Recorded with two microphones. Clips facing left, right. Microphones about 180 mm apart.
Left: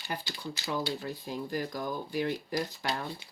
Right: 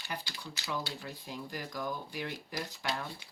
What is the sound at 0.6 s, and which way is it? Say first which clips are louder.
Speech: left 5 dB; 35° left (ahead or behind).